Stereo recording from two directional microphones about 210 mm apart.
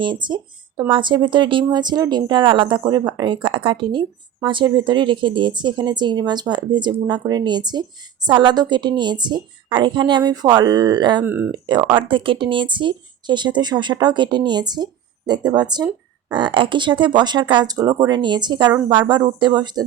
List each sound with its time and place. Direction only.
0.0 s speech: 20° right (ahead or behind)
11.2 s speech: 10° right (ahead or behind)
11.5 s speech: 20° right (ahead or behind)